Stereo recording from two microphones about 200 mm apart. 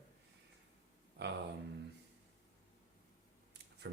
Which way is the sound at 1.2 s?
55° right (ahead or behind).